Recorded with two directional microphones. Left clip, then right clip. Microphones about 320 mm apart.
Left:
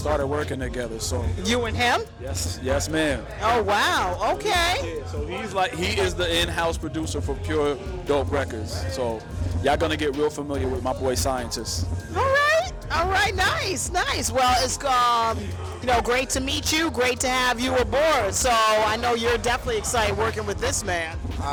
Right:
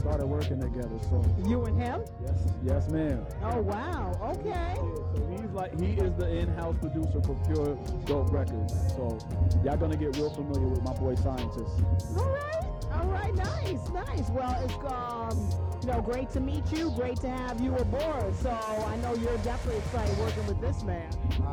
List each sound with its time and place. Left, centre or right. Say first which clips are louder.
0.0 s a woman's voice: left 9 dB; centre
9.6 s a woman's voice: left 9 dB; centre